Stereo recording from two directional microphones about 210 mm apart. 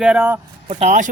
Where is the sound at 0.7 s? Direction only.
35° right (ahead or behind).